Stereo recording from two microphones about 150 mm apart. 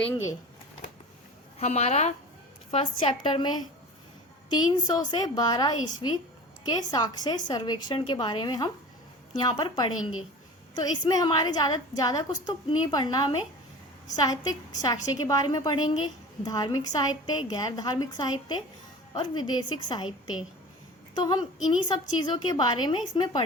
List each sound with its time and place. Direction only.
0.0 s a woman's voice: 20° left (ahead or behind)
1.5 s a woman's voice: 45° left (ahead or behind)
2.7 s a woman's voice: 35° left (ahead or behind)
21.2 s a woman's voice: 30° left (ahead or behind)